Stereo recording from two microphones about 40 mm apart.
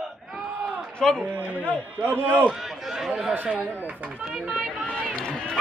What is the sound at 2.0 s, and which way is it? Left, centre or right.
Speech, right.